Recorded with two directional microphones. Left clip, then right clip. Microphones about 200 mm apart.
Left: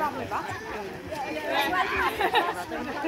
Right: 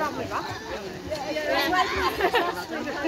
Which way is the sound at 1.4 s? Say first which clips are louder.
Right 2 dB; 45° left (ahead or behind).